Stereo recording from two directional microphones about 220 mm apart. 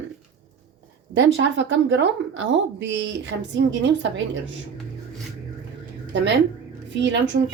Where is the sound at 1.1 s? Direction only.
55° right (ahead or behind).